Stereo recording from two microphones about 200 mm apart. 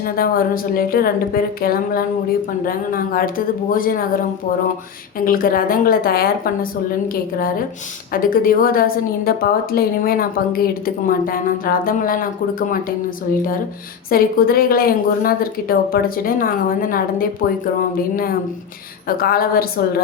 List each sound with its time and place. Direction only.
0.0 s a woman's voice: 45° left (ahead or behind)
5.2 s a woman's voice: 45° left (ahead or behind)
14.1 s a woman's voice: 45° left (ahead or behind)
19.0 s a woman's voice: 45° left (ahead or behind)